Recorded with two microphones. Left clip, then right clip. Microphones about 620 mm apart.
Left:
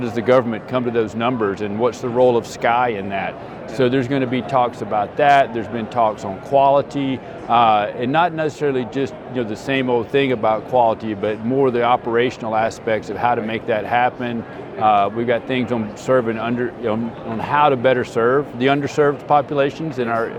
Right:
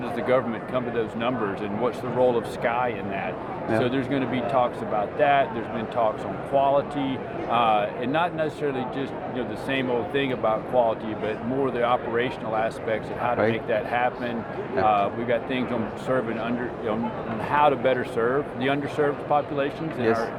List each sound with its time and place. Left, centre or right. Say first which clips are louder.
0.2 s speech: left 8 dB; left